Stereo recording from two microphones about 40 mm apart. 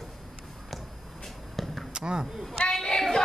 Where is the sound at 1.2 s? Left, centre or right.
Centre.